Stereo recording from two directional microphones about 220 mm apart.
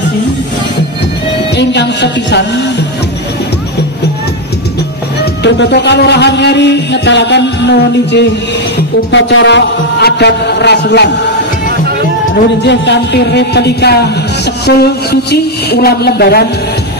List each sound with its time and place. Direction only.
1.6 s speech: 50° left (ahead or behind)
5.4 s speech: 50° left (ahead or behind)
12.6 s speech: 50° left (ahead or behind)